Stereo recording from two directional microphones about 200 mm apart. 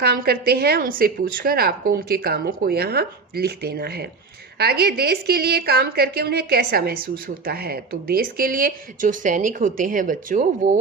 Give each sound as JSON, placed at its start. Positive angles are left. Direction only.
{"t": 0.0, "sound": "a woman's voice", "side_deg": -50}